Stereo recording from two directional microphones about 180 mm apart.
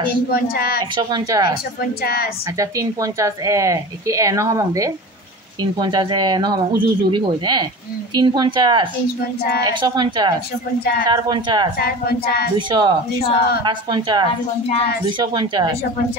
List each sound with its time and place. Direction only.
0.3 s speech: 60° left (ahead or behind)
0.9 s speech: 20° right (ahead or behind)
2.6 s speech: 20° right (ahead or behind)
11.8 s speech: 60° left (ahead or behind)
12.5 s speech: 25° right (ahead or behind)